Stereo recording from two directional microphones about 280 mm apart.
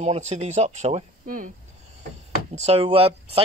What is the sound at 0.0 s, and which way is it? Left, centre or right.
Speech, right.